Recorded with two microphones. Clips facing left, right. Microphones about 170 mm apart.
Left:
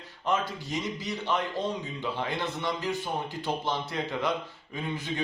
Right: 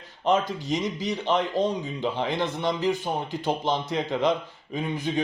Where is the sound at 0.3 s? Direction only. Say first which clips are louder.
Right 6 dB; 15° right (ahead or behind).